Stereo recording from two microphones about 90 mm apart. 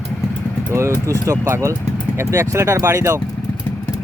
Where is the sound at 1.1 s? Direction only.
35° right (ahead or behind).